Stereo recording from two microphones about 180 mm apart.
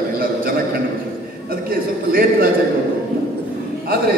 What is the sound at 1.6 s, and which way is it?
Speech, 55° right (ahead or behind).